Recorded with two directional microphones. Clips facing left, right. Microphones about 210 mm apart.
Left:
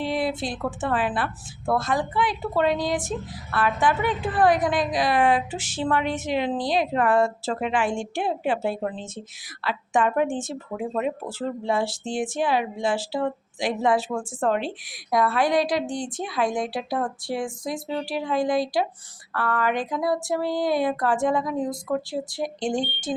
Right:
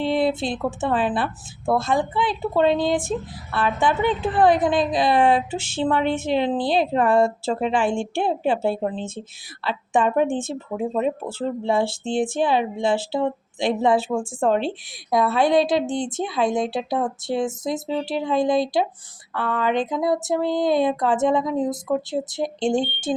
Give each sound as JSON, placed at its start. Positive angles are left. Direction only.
{"t": 0.0, "sound": "a woman's voice", "side_deg": -25}